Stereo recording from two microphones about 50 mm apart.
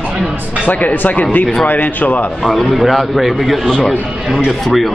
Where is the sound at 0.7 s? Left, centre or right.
Left.